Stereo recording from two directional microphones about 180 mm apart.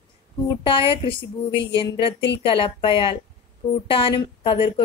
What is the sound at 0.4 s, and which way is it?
A woman's voice, 30° left (ahead or behind).